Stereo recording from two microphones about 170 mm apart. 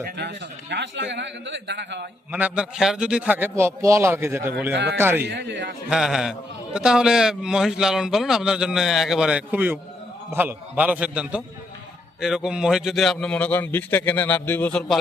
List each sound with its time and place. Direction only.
0.2 s a man's voice: 90° right
2.3 s a man's voice: 5° right (ahead or behind)
4.7 s a man's voice: 90° right
4.9 s a man's voice: 15° right (ahead or behind)
5.2 s a man's voice: 75° right (ahead or behind)
5.9 s a man's voice: centre (ahead or behind)